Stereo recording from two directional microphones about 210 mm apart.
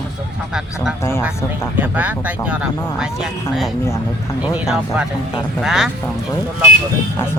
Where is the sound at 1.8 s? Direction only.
10° right (ahead or behind).